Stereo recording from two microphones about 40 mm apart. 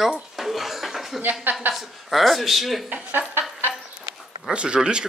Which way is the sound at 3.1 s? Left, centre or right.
Right.